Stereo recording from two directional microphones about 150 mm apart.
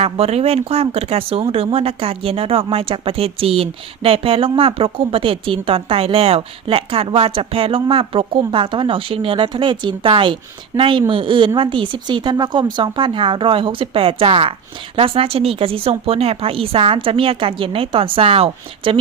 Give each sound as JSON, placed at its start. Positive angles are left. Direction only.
{"t": 0.0, "sound": "speech", "side_deg": -45}